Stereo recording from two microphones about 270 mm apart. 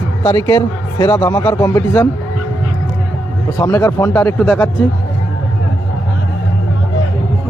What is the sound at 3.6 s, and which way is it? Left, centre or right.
A man's voice, centre.